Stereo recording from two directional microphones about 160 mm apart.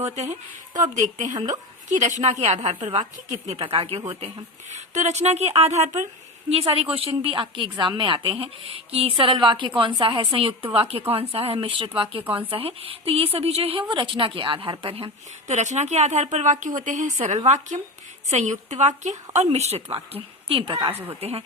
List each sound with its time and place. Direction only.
0.2 s a woman's voice: 50° right (ahead or behind); by 4.4 s 30° right (ahead or behind)
4.7 s a woman's voice: 45° right (ahead or behind)
20.9 s speech: 15° right (ahead or behind)
21.2 s a woman's voice: 40° right (ahead or behind)